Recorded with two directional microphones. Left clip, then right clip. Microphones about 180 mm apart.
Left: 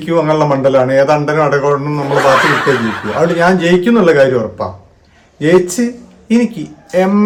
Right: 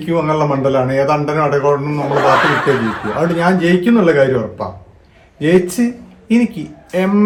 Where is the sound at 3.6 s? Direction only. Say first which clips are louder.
Left 3 dB; 20° left (ahead or behind).